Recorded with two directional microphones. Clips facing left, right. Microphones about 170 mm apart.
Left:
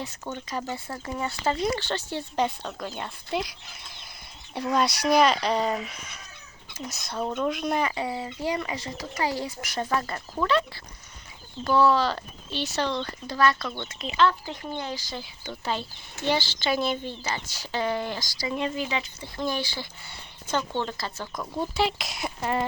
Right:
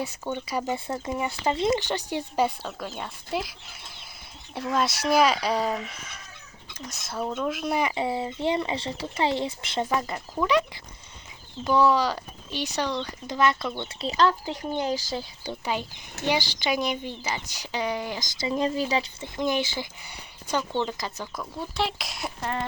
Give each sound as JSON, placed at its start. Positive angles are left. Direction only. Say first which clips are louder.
{"t": 0.4, "sound": "speech", "louder": "right 4 dB", "side_deg": -15}
{"t": 4.5, "sound": "speech", "louder": "left 1 dB", "side_deg": 0}
{"t": 7.9, "sound": "speech", "louder": "right 3 dB", "side_deg": -25}
{"t": 11.6, "sound": "speech", "louder": "even", "side_deg": -15}
{"t": 13.8, "sound": "speech", "louder": "even", "side_deg": -35}
{"t": 14.4, "sound": "speech", "louder": "right 5 dB", "side_deg": -20}
{"t": 18.5, "sound": "speech", "louder": "right 4 dB", "side_deg": -35}
{"t": 19.4, "sound": "speech", "louder": "right 3 dB", "side_deg": -20}
{"t": 21.8, "sound": "speech", "louder": "left 1 dB", "side_deg": 0}